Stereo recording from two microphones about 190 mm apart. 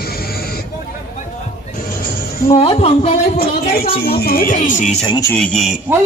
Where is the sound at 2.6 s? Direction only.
30° left (ahead or behind).